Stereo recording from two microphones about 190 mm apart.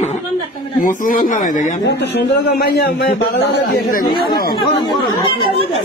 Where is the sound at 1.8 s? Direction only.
65° left (ahead or behind).